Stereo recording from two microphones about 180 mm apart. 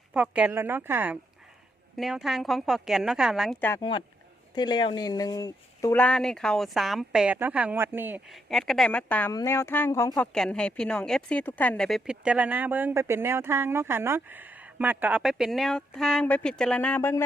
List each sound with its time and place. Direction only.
0.1 s speech: 5° right (ahead or behind)
3.8 s speech: 25° left (ahead or behind); by 8.2 s 10° right (ahead or behind)
8.3 s speech: centre (ahead or behind)
10.3 s speech: 5° left (ahead or behind)